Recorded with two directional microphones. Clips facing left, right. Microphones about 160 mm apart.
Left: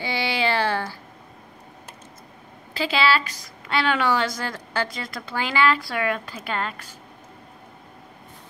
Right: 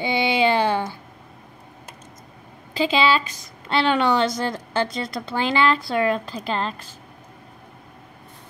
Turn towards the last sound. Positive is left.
turn(degrees=-30)  # may be behind; listen again after turning